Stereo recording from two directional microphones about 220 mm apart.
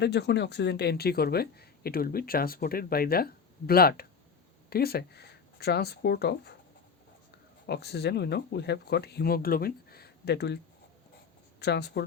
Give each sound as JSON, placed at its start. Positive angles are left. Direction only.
{"t": 0.0, "sound": "speech", "side_deg": 50}
{"t": 7.7, "sound": "speech", "side_deg": 45}
{"t": 11.6, "sound": "speech", "side_deg": 50}